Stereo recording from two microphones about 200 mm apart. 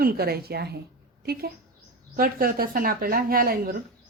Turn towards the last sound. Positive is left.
turn(degrees=-45)  # may be behind; listen again after turning